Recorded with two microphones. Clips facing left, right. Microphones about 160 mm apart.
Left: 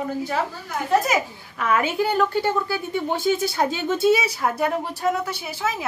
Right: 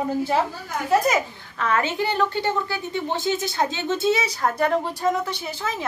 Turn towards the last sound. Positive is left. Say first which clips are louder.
# left 2 dB
turn(degrees=5)  # may be behind; listen again after turning